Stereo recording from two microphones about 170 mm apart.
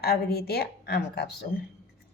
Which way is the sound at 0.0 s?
65° left (ahead or behind).